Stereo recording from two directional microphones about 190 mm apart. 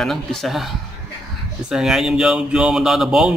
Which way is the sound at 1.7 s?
5° right (ahead or behind).